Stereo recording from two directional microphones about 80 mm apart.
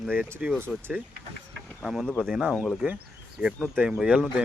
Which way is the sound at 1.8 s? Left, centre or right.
Centre.